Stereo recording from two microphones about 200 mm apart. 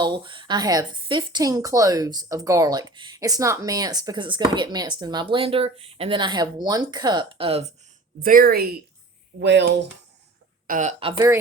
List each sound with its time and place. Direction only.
0.0 s speech: 25° right (ahead or behind)
8.2 s speech: 45° right (ahead or behind)
9.4 s speech: 60° right (ahead or behind)
10.7 s speech: 40° right (ahead or behind)